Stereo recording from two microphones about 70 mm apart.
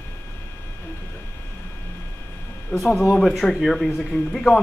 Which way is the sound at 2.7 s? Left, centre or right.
Left.